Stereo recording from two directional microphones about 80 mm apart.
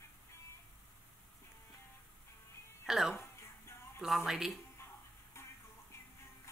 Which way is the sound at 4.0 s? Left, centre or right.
Centre.